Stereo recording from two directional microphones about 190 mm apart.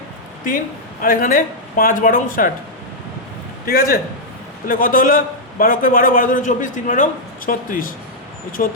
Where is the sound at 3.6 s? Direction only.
50° left (ahead or behind).